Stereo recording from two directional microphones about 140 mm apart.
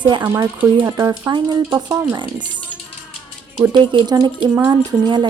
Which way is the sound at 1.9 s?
15° right (ahead or behind).